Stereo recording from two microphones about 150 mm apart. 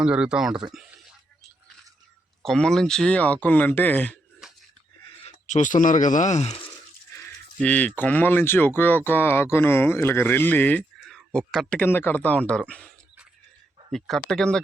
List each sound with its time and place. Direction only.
0.0 s speech: 5° right (ahead or behind)
2.4 s speech: 5° left (ahead or behind)
5.2 s speech: 55° left (ahead or behind)
7.1 s a sound: 20° left (ahead or behind)
7.6 s speech: 10° left (ahead or behind)
13.9 s speech: centre (ahead or behind)